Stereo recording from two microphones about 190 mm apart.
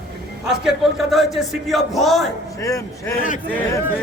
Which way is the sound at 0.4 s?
Centre (ahead or behind).